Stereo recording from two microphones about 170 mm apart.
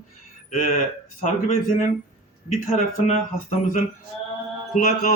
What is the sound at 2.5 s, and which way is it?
Speech, 40° left (ahead or behind).